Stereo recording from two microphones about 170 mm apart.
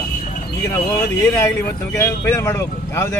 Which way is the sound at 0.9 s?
15° left (ahead or behind).